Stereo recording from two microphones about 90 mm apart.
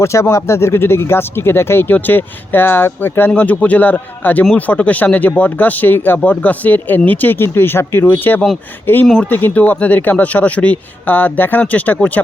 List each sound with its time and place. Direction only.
0.0 s speech: 30° left (ahead or behind); by 12.2 s 15° left (ahead or behind)